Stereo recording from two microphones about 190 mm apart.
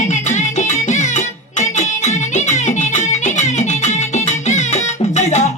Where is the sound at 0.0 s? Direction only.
40° left (ahead or behind).